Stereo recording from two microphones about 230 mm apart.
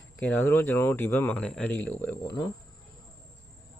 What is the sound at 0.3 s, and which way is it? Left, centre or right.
Speech, centre.